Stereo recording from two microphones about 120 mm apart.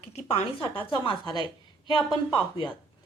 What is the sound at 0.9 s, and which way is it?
Speech, 40° left (ahead or behind).